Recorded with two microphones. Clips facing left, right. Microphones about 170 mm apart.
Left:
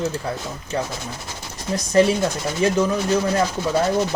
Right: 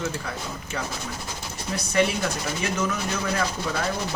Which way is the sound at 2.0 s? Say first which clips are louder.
Left 7 dB; 30° left (ahead or behind).